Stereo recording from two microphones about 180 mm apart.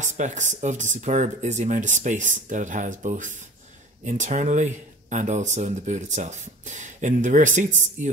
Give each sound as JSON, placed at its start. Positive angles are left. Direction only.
{"t": 0.0, "sound": "speech", "side_deg": -40}